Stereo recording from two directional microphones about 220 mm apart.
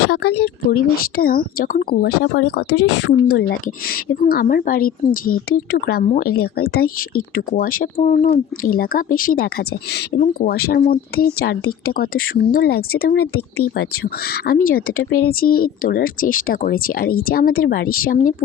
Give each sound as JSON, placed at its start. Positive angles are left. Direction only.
{"t": 0.1, "sound": "speech", "side_deg": 50}
{"t": 2.6, "sound": "a woman's voice", "side_deg": 90}
{"t": 3.2, "sound": "speech", "side_deg": 45}